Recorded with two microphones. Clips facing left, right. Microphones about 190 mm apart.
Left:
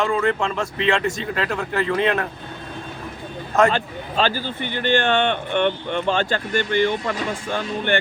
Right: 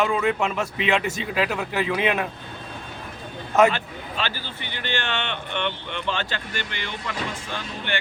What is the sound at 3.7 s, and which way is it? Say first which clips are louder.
Speech: left 7 dB; 45° left (ahead or behind).